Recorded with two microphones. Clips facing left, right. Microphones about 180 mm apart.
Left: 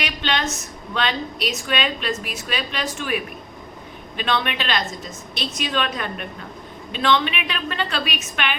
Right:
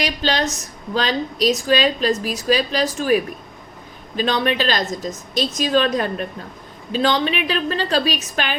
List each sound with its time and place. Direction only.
0.0 s a woman's voice: 35° right (ahead or behind)